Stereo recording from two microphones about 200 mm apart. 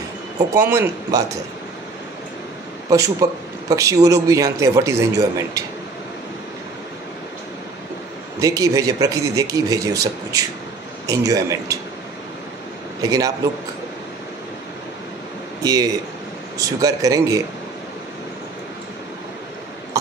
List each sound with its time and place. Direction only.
0.6 s speech: 10° right (ahead or behind)
2.9 s speech: 15° right (ahead or behind)
8.4 s speech: 15° right (ahead or behind)
15.6 s speech: 20° right (ahead or behind)